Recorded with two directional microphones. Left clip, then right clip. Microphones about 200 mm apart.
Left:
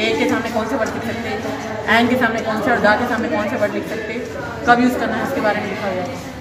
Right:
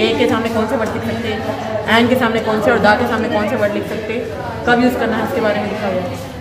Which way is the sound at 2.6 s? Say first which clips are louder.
Right 2 dB; 50° right (ahead or behind).